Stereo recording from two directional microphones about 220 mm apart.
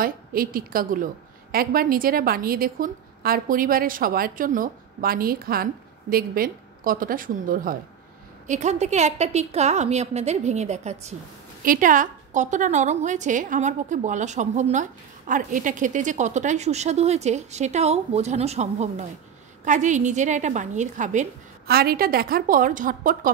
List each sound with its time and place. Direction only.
0.0 s a woman's voice: 40° right (ahead or behind)